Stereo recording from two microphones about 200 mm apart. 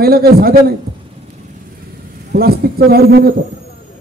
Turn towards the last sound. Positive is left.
turn(degrees=-50)  # may be behind; listen again after turning